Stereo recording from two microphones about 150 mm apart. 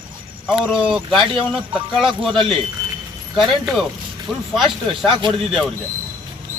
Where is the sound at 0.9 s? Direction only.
Centre (ahead or behind).